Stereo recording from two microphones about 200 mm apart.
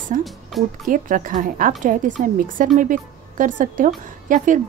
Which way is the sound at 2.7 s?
40° right (ahead or behind).